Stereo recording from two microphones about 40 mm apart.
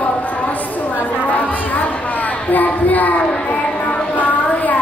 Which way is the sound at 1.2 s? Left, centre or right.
Left.